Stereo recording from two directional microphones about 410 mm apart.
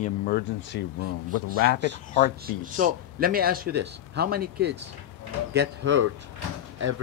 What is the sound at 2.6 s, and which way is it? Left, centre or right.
Speech, centre.